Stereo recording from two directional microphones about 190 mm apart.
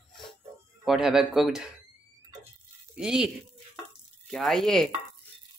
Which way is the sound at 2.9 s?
5° right (ahead or behind).